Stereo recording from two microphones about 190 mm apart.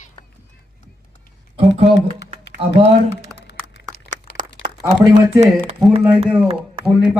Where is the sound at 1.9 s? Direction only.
70° left (ahead or behind).